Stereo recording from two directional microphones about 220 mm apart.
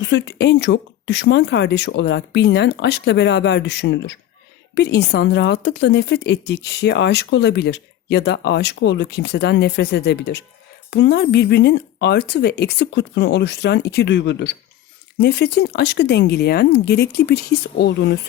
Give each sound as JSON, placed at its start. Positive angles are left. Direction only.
{"t": 0.0, "sound": "a woman's voice", "side_deg": 55}